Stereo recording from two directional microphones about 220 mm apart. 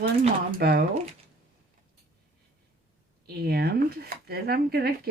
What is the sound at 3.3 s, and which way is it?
Speech, 45° right (ahead or behind).